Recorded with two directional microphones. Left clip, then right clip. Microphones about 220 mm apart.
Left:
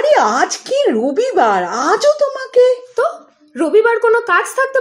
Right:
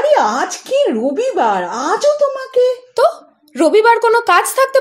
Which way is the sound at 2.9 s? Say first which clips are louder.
Right 4 dB; 35° right (ahead or behind).